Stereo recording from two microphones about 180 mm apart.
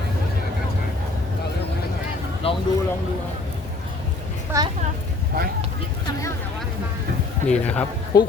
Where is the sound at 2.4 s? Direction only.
30° left (ahead or behind).